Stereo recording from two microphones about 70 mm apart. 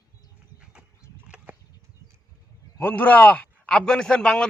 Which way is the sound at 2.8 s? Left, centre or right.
Left.